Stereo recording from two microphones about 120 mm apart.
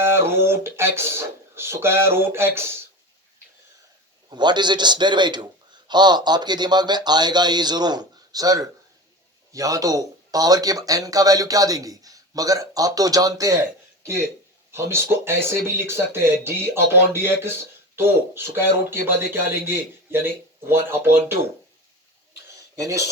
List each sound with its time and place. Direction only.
0.0 s speech: 20° right (ahead or behind)
4.3 s speech: 40° right (ahead or behind); by 21.3 s 20° right (ahead or behind)
22.7 s cutlery: 25° right (ahead or behind)